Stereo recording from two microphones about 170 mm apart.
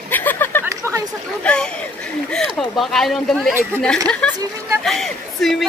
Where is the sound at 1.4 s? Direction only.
5° left (ahead or behind).